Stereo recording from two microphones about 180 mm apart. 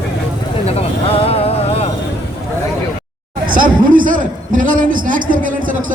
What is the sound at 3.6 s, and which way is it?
A man's voice, 50° right (ahead or behind).